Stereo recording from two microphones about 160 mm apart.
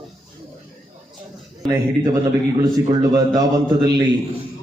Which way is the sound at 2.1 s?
20° right (ahead or behind).